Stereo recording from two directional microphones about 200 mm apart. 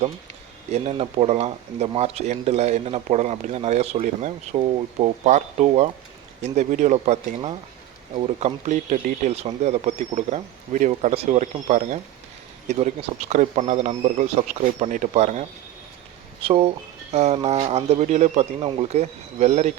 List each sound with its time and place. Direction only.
0.7 s speech: 30° right (ahead or behind)